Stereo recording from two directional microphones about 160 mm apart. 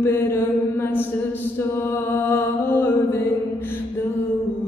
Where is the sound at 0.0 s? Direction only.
15° left (ahead or behind).